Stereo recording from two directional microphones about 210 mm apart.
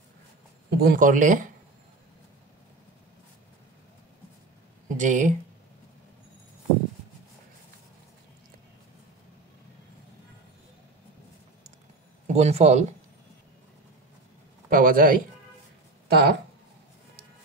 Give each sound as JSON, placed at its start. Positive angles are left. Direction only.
{"t": 0.7, "sound": "speech", "side_deg": -50}
{"t": 4.9, "sound": "speech", "side_deg": -35}
{"t": 12.3, "sound": "speech", "side_deg": -30}
{"t": 14.7, "sound": "speech", "side_deg": -40}